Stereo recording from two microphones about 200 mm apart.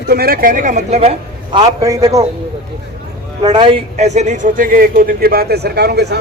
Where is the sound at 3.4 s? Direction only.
25° right (ahead or behind).